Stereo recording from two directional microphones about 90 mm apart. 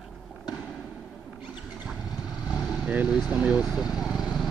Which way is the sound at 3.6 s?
Centre (ahead or behind).